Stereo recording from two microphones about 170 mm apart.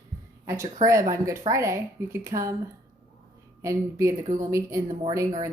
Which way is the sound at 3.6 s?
20° right (ahead or behind).